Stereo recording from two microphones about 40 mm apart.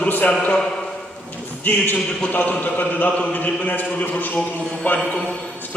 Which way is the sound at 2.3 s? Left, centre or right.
Left.